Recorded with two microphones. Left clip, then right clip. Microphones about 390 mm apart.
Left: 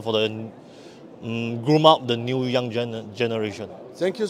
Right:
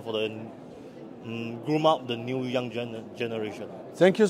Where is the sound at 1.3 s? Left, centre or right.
Left.